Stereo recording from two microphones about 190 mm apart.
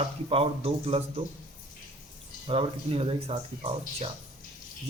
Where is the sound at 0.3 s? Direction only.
30° right (ahead or behind).